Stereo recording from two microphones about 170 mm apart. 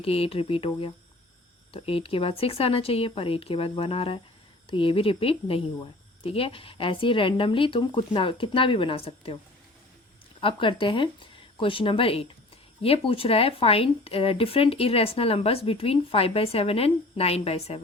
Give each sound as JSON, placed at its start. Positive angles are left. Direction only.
{"t": 0.0, "sound": "speech", "side_deg": 35}
{"t": 10.4, "sound": "speech", "side_deg": 30}